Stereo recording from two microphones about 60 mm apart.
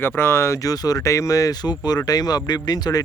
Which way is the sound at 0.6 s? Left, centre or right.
Left.